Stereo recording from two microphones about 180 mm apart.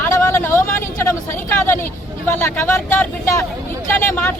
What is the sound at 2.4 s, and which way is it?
Speech, 10° left (ahead or behind).